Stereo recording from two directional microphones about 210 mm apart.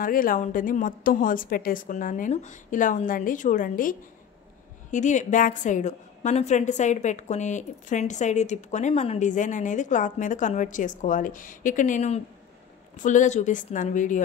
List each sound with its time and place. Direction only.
0.0 s a woman's voice: 40° left (ahead or behind)
4.9 s a woman's voice: 35° left (ahead or behind)